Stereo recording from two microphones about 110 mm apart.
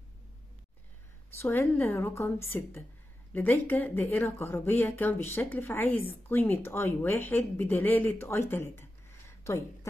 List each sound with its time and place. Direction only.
1.4 s speech: 20° left (ahead or behind)